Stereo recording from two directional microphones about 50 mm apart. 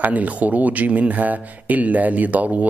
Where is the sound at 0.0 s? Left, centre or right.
Right.